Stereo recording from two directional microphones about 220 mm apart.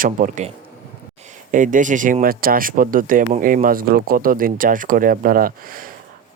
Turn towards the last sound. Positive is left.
turn(degrees=-40)  # may be behind; listen again after turning